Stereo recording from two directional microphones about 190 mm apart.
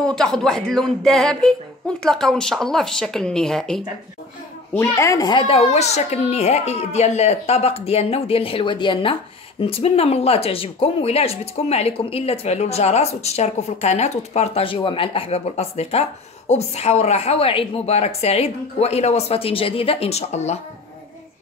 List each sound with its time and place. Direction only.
0.0 s speech: 5° left (ahead or behind)
4.7 s speech: 15° left (ahead or behind); by 20.5 s 35° left (ahead or behind)